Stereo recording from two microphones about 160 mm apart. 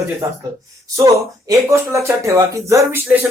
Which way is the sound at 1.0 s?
20° right (ahead or behind).